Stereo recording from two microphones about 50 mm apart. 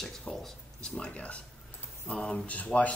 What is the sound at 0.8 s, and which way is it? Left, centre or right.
Speech, left.